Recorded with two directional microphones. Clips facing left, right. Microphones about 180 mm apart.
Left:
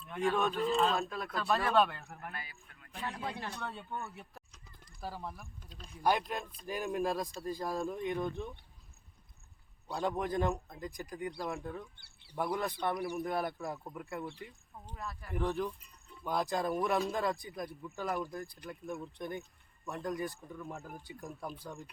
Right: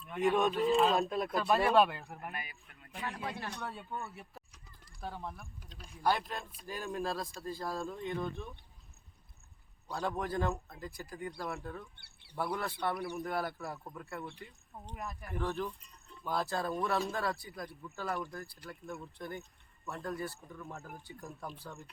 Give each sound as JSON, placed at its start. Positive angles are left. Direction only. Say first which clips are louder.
{"t": 0.2, "sound": "speech", "louder": "right 2 dB", "side_deg": -20}
{"t": 0.9, "sound": "speech", "louder": "right 4 dB", "side_deg": -25}
{"t": 1.3, "sound": "speech", "louder": "right 2 dB", "side_deg": -10}
{"t": 3.5, "sound": "speech", "louder": "even", "side_deg": 0}
{"t": 6.0, "sound": "speech", "louder": "left 1 dB", "side_deg": 15}
{"t": 9.9, "sound": "speech", "louder": "left 2 dB", "side_deg": 15}
{"t": 11.9, "sound": "a sound", "louder": "right 1 dB", "side_deg": -60}
{"t": 12.4, "sound": "speech", "louder": "left 1 dB", "side_deg": 15}
{"t": 14.9, "sound": "speech", "louder": "even", "side_deg": -20}
{"t": 15.4, "sound": "speech", "louder": "left 2 dB", "side_deg": 15}